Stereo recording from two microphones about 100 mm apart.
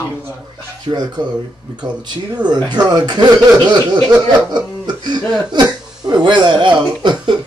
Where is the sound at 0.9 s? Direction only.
45° right (ahead or behind).